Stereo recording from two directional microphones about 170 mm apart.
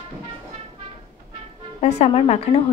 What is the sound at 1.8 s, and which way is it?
Speech, 40° left (ahead or behind).